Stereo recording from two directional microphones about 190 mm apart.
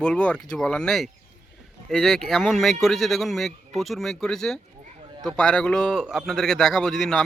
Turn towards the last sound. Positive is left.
turn(degrees=0)  # may be behind; listen again after turning